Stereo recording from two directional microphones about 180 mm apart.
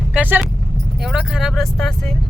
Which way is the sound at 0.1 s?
10° right (ahead or behind).